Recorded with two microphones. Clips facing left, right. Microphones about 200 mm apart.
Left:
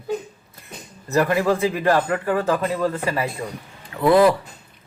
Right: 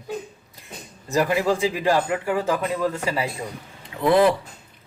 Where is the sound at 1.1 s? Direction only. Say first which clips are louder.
Left 2 dB; 15° right (ahead or behind).